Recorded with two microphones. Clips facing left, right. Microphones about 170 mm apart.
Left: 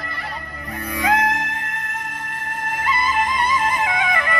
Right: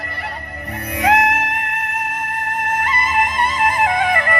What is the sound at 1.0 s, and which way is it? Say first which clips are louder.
Music: right 4 dB; 75° right (ahead or behind).